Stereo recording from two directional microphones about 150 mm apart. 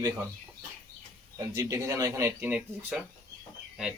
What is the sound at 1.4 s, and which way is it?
A man's voice, 20° right (ahead or behind).